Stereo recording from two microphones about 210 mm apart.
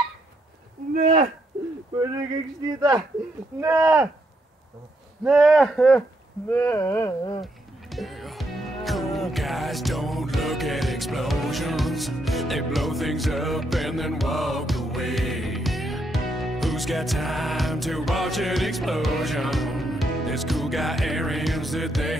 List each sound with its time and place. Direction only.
0.9 s speech: 30° right (ahead or behind)
3.6 s speech: 10° right (ahead or behind)
5.2 s speech: centre (ahead or behind); by 7.4 s 20° left (ahead or behind)
7.9 s music: centre (ahead or behind)